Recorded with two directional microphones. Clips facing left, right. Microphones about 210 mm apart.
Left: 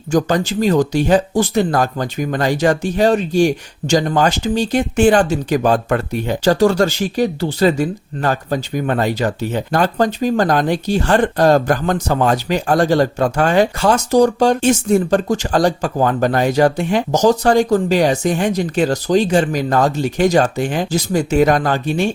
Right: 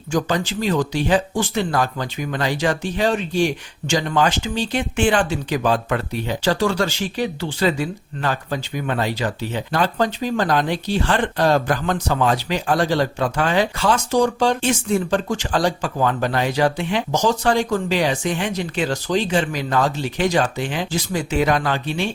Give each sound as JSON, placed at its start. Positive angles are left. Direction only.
{"t": 0.1, "sound": "speech", "side_deg": 40}